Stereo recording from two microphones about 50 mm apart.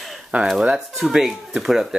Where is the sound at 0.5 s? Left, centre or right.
Centre.